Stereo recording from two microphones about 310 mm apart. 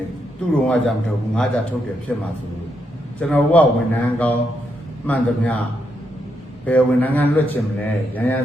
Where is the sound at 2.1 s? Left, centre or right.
Centre.